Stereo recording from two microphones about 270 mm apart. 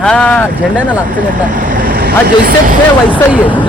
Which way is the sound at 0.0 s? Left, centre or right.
Centre.